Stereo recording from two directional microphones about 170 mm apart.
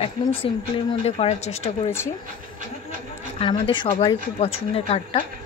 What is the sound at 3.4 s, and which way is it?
A woman's voice, 30° left (ahead or behind).